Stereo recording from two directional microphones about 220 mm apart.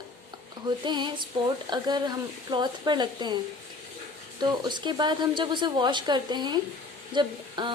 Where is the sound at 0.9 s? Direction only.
20° right (ahead or behind).